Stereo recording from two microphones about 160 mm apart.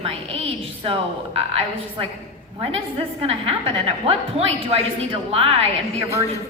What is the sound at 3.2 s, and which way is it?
A woman's voice, 35° right (ahead or behind).